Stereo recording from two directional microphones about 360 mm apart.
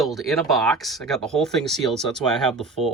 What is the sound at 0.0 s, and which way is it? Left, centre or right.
Speech, centre.